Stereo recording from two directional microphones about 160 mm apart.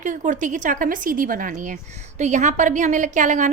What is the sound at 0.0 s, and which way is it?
A woman's voice, 50° right (ahead or behind).